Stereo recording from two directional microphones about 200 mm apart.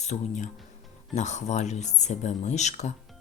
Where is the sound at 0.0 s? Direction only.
35° left (ahead or behind).